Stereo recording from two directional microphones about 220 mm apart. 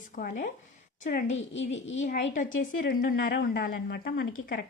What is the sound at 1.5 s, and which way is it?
A woman's voice, 55° left (ahead or behind).